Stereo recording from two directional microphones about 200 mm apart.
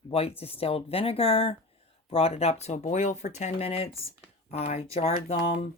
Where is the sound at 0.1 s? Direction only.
30° left (ahead or behind).